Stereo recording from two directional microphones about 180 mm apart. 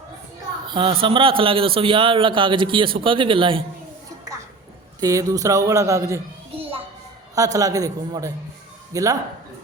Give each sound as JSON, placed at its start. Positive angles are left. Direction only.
{"t": 0.7, "sound": "a man's voice", "side_deg": -30}
{"t": 4.9, "sound": "speech", "side_deg": -20}
{"t": 6.6, "sound": "a sound", "side_deg": -30}
{"t": 7.3, "sound": "a man's voice", "side_deg": -20}